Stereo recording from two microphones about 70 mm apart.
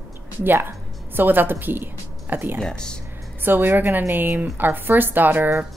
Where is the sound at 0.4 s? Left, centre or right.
Right.